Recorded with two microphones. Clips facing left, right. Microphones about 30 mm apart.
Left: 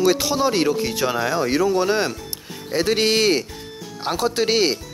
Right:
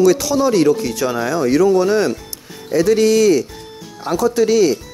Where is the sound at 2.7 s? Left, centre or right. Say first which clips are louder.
Right 6 dB; left.